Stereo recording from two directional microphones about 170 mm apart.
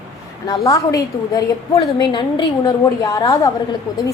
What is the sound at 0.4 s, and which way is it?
A woman's voice, 20° left (ahead or behind).